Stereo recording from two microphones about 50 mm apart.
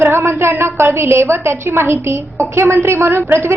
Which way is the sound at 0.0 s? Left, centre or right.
Right.